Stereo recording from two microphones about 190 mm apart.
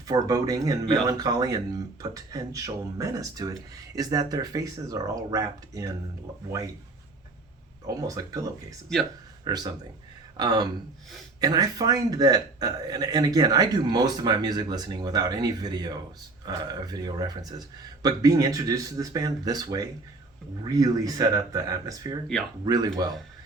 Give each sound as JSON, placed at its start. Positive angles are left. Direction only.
{"t": 0.1, "sound": "speech", "side_deg": -20}
{"t": 7.9, "sound": "speech", "side_deg": -20}